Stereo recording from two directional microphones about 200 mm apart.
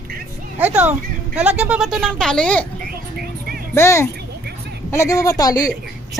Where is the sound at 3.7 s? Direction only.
15° left (ahead or behind).